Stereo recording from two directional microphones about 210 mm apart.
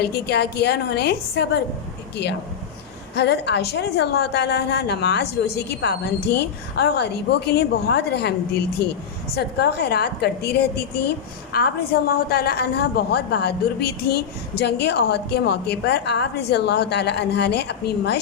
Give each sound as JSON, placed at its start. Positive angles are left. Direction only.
{"t": 0.0, "sound": "a woman's voice", "side_deg": 50}